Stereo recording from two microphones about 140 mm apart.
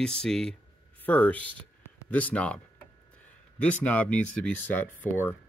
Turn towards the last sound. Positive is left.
turn(degrees=15)  # may be behind; listen again after turning